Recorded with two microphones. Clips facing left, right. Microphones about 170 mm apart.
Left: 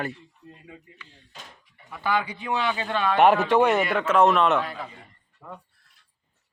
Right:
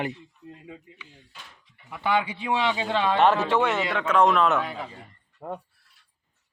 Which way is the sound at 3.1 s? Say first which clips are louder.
Left 4 dB; 15° left (ahead or behind).